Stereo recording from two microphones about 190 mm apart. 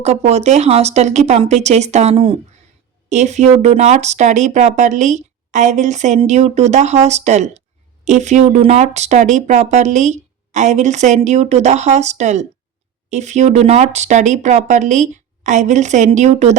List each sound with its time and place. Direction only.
0.0 s speech: 35° right (ahead or behind)